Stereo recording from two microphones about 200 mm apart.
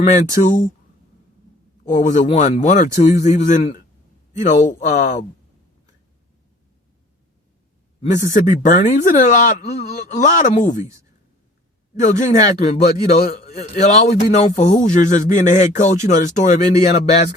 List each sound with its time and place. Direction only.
0.0 s a man's voice: 35° left (ahead or behind)
1.8 s a man's voice: 40° left (ahead or behind)
8.3 s a man's voice: 40° left (ahead or behind)
11.9 s a man's voice: 40° left (ahead or behind)